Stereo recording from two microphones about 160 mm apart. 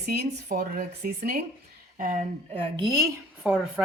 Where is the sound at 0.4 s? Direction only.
65° right (ahead or behind).